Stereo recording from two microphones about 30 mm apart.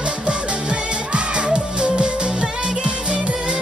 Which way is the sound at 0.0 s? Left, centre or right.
Right.